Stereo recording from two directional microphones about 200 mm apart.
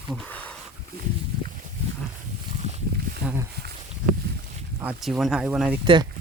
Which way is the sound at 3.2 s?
5° right (ahead or behind).